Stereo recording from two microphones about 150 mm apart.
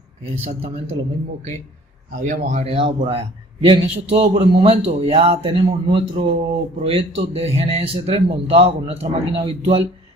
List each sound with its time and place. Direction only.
2.2 s speech: 55° right (ahead or behind)
2.7 s a man's voice: 40° right (ahead or behind)